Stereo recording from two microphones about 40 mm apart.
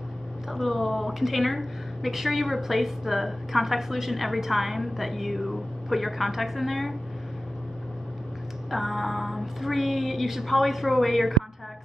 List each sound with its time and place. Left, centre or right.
0.5 s a woman's voice: centre
8.6 s a woman's voice: centre